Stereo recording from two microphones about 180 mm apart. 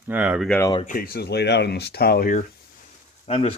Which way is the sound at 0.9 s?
55° left (ahead or behind).